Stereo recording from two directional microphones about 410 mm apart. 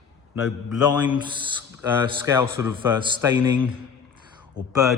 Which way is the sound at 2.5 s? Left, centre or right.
Centre.